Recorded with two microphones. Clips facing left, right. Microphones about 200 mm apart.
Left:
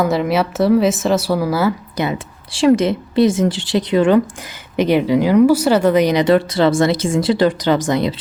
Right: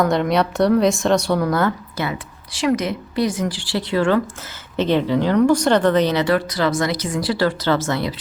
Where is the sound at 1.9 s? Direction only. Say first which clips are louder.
Left 5 dB; 25° left (ahead or behind).